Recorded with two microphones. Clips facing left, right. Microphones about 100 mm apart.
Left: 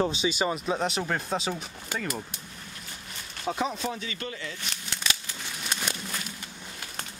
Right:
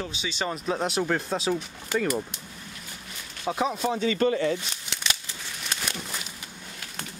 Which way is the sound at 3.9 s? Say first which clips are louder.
Right 13 dB; 35° right (ahead or behind).